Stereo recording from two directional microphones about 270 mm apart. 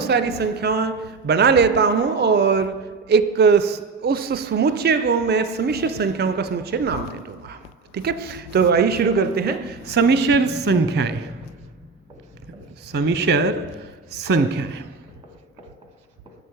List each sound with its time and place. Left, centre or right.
0.0 s a man's voice: right
7.9 s a man's voice: right
12.8 s a man's voice: right